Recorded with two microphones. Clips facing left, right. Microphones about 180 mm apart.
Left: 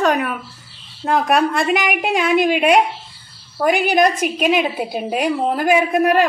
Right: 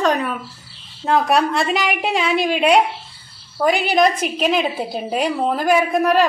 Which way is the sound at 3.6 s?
50° left (ahead or behind).